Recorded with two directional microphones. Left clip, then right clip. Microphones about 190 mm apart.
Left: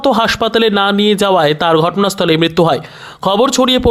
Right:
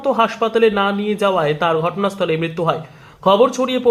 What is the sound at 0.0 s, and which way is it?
Speech, 45° left (ahead or behind).